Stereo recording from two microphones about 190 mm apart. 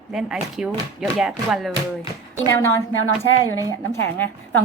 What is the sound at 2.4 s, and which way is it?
A woman's voice, 15° left (ahead or behind).